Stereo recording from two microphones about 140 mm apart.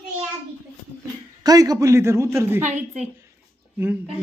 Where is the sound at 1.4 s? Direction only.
25° right (ahead or behind).